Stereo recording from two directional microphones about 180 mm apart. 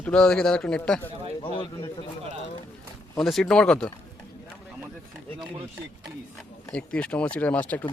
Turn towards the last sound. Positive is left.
turn(degrees=10)  # may be behind; listen again after turning